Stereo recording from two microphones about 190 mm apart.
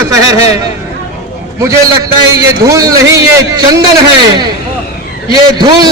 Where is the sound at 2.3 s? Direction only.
20° right (ahead or behind).